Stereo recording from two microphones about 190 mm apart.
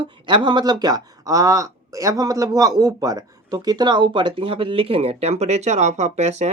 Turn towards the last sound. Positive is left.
turn(degrees=-35)  # may be behind; listen again after turning